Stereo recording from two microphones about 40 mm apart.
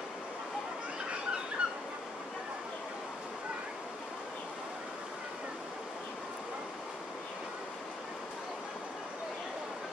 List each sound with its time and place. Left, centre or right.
1.6 s dog: right